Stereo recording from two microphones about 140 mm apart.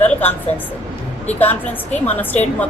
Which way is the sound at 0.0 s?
15° left (ahead or behind).